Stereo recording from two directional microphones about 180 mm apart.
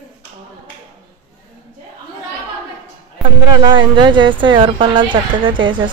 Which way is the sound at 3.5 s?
25° right (ahead or behind).